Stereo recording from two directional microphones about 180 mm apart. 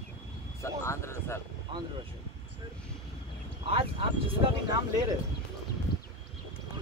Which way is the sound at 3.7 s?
30° right (ahead or behind).